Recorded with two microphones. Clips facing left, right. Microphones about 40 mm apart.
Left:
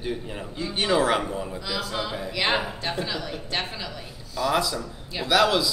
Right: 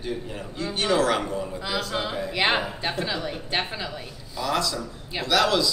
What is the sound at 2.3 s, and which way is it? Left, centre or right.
Speech, centre.